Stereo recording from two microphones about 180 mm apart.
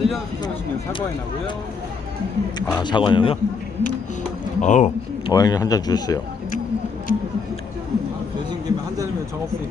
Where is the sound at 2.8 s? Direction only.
25° left (ahead or behind).